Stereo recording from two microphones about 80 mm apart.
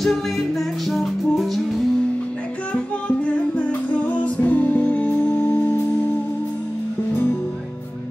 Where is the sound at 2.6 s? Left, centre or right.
Centre.